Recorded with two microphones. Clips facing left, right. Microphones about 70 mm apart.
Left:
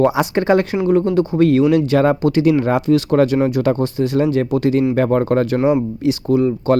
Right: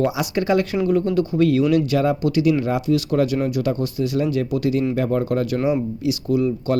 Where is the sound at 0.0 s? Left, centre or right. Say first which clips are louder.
Left 6 dB; left.